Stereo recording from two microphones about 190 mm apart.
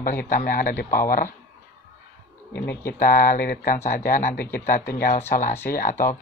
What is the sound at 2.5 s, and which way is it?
Speech, 55° left (ahead or behind).